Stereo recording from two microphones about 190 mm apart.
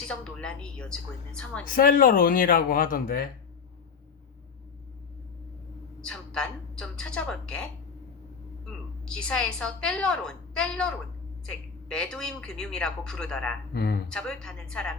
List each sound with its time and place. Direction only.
0.1 s speech: 5° left (ahead or behind)
1.6 s speech: 50° left (ahead or behind)
6.0 s speech: 5° left (ahead or behind)
9.0 s speech: 5° left (ahead or behind)
13.7 s speech: 50° left (ahead or behind)
14.1 s speech: 5° left (ahead or behind)